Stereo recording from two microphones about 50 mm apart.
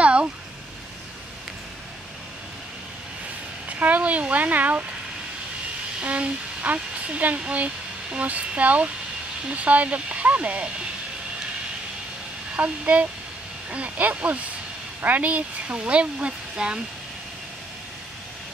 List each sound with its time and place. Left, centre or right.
0.0 s a sound: right
3.6 s speech: right
6.0 s speech: right
12.5 s speech: right